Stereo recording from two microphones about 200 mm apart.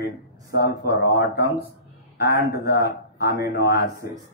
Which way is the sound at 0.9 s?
50° left (ahead or behind).